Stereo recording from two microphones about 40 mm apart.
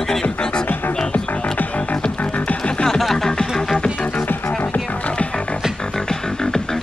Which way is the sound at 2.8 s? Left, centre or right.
Centre.